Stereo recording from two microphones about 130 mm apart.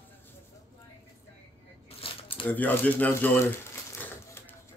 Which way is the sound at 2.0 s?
45° left (ahead or behind).